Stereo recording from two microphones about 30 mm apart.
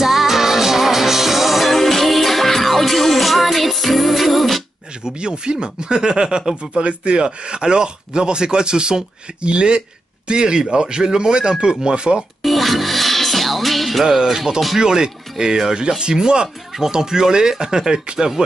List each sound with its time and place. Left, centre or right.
0.0 s music: centre
1.7 s music: centre
5.0 s speech: right
6.8 s speech: right
12.4 s music: centre
14.0 s music: centre
14.8 s speech: right
16.0 s speech: right